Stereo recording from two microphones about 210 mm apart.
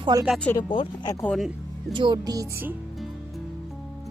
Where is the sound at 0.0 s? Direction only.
20° right (ahead or behind).